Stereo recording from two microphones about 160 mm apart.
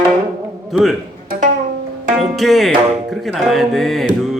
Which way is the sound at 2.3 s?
Centre (ahead or behind).